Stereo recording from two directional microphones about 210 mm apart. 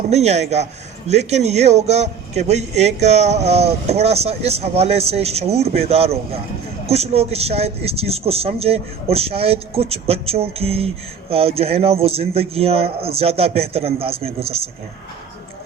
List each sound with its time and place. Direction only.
0.1 s a man's voice: 30° right (ahead or behind)